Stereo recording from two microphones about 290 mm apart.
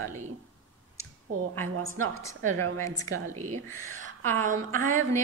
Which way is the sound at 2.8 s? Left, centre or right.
Centre.